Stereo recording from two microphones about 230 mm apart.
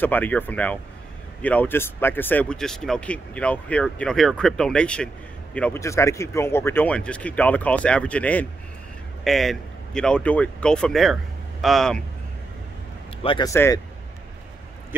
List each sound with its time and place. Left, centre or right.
0.0 s speech: centre
13.2 s speech: centre